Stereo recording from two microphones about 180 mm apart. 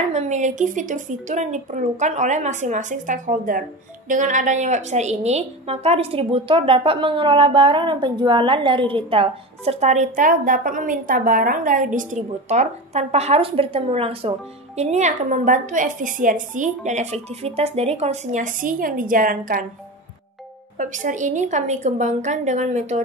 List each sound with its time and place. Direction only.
0.1 s a woman's voice: 40° right (ahead or behind)
20.7 s a woman's voice: 45° right (ahead or behind)